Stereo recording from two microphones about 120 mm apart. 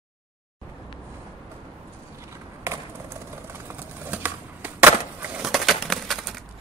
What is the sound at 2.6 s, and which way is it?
Skateboard, 25° right (ahead or behind).